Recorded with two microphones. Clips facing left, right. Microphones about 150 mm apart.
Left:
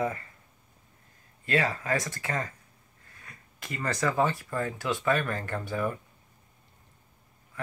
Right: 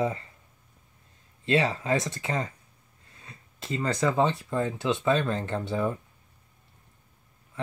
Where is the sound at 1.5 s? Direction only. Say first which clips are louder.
Right 3 dB; 25° right (ahead or behind).